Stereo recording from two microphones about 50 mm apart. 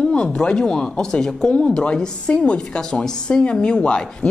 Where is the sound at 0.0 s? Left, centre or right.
Centre.